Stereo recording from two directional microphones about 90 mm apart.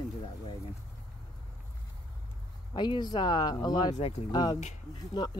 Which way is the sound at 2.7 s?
55° left (ahead or behind).